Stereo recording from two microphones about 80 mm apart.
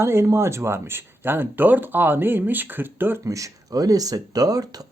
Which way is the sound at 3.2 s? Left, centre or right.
Right.